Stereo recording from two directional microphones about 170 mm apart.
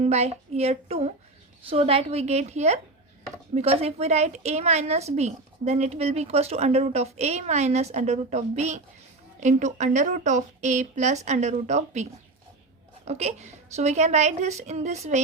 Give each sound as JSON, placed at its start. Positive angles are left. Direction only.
{"t": 0.0, "sound": "a woman's voice", "side_deg": -40}
{"t": 13.1, "sound": "a woman's voice", "side_deg": -40}